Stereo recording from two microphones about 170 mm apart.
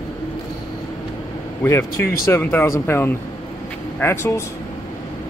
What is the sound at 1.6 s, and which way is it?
Speech, 15° left (ahead or behind).